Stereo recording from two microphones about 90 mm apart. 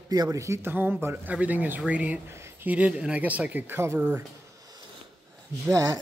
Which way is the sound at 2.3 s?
30° right (ahead or behind).